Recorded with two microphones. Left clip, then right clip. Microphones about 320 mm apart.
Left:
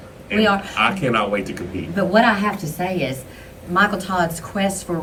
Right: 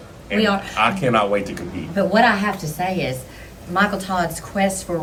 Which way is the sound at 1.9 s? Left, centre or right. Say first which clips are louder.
Even; centre.